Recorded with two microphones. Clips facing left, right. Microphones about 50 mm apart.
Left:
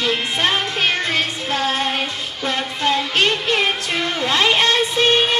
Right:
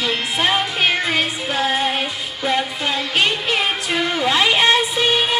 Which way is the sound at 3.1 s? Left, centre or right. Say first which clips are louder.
Left 1 dB; centre.